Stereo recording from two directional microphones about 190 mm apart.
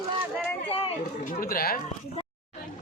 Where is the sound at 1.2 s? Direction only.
45° left (ahead or behind).